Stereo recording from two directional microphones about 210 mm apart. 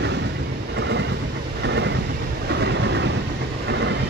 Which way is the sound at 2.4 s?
55° right (ahead or behind).